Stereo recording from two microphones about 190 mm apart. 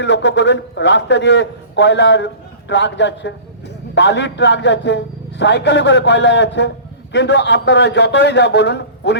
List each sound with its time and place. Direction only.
0.0 s a man's voice: 65° left (ahead or behind)